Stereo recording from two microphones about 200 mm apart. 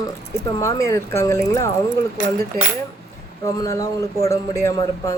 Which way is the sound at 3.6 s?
15° left (ahead or behind).